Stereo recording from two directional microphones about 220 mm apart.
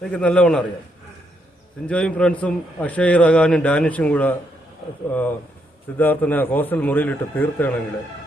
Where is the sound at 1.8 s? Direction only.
5° left (ahead or behind).